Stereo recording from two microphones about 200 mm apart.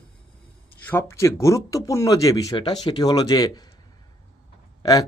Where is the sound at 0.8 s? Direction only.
10° left (ahead or behind).